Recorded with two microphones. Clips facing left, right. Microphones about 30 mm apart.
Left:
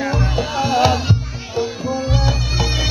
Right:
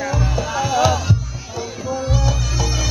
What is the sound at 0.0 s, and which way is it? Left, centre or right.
Music, left.